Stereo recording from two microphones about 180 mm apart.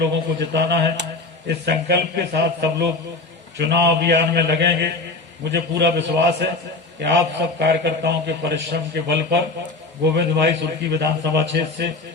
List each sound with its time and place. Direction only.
0.0 s a man's voice: 70° right (ahead or behind)